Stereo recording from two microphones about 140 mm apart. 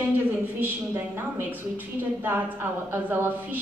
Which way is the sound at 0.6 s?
15° right (ahead or behind).